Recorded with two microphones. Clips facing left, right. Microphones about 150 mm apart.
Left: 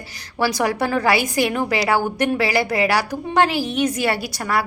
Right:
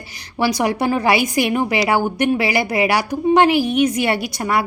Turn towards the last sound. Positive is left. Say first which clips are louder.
# right 3 dB
turn(degrees=-20)  # may be behind; listen again after turning